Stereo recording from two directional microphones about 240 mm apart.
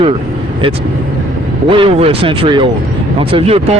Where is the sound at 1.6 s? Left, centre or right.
Right.